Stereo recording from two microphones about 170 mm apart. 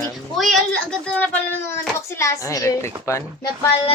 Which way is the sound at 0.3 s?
Centre (ahead or behind).